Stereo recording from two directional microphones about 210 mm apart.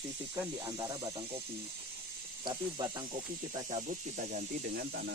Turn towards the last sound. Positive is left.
turn(degrees=-50)  # may be behind; listen again after turning